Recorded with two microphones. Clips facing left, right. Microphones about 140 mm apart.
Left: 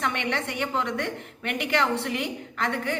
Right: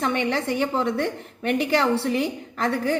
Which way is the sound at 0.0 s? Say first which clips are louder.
Right 5 dB; 35° right (ahead or behind).